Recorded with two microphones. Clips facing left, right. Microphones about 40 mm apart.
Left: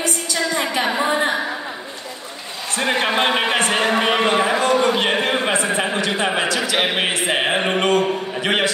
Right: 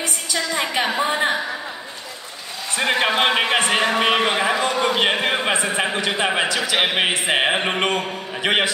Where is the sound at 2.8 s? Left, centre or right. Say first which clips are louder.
Even; right.